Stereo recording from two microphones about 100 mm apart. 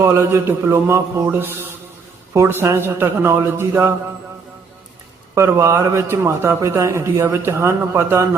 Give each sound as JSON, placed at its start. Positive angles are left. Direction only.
{"t": 0.0, "sound": "a man's voice", "side_deg": -25}
{"t": 5.3, "sound": "a man's voice", "side_deg": -30}